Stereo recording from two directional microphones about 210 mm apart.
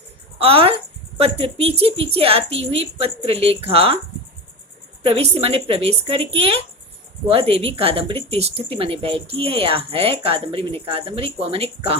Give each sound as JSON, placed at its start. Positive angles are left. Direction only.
{"t": 0.3, "sound": "speech", "side_deg": -25}
{"t": 5.0, "sound": "speech", "side_deg": -30}